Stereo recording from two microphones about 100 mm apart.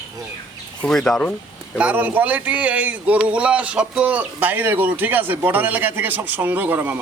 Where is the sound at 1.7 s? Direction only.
15° right (ahead or behind).